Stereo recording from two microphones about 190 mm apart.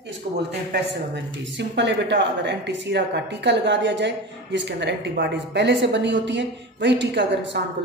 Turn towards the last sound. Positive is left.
turn(degrees=-70)  # may be behind; listen again after turning